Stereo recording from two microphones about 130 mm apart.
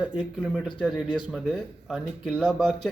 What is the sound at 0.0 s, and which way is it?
Speech, 10° right (ahead or behind).